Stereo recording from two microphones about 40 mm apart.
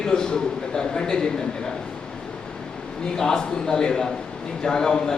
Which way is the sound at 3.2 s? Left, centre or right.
Centre.